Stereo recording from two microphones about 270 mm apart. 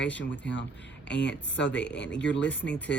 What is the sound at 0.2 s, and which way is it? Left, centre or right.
Speech, left.